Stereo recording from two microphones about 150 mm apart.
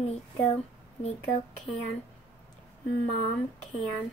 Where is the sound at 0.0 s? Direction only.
45° left (ahead or behind).